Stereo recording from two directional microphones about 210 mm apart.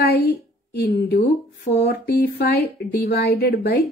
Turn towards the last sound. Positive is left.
turn(degrees=50)  # may be behind; listen again after turning